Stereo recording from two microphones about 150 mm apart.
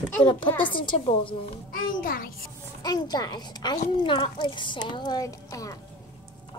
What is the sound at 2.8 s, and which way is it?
A woman's voice, 25° left (ahead or behind).